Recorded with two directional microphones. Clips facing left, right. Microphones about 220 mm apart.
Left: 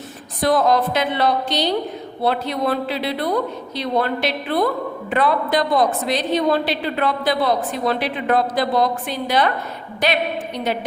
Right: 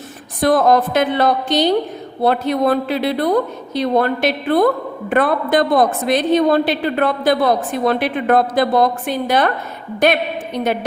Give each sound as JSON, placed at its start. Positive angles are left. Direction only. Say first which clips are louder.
{"t": 0.4, "sound": "a woman's voice", "louder": "right 3 dB", "side_deg": -50}